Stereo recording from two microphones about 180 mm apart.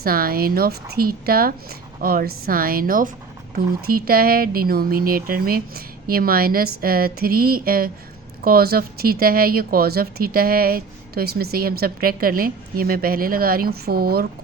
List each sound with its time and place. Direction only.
0.0 s a woman's voice: 55° right (ahead or behind)